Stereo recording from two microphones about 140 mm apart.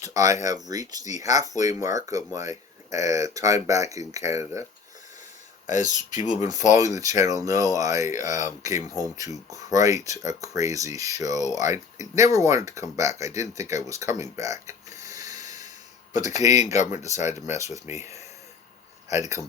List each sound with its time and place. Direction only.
0.0 s speech: 25° right (ahead or behind)
5.6 s speech: 60° left (ahead or behind)
6.7 s speech: 25° right (ahead or behind)
15.4 s a sound: 60° left (ahead or behind)
16.1 s speech: 55° left (ahead or behind)
17.6 s speech: 20° right (ahead or behind)